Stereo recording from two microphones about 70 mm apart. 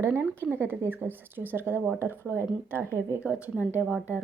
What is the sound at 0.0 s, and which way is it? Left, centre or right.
A woman's voice, right.